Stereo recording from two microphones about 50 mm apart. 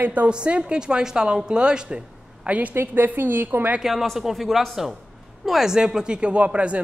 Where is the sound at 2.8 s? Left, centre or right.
Right.